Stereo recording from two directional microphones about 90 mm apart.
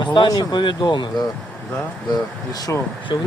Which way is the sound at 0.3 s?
50° left (ahead or behind).